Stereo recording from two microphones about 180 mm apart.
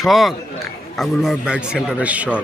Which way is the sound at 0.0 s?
Centre (ahead or behind).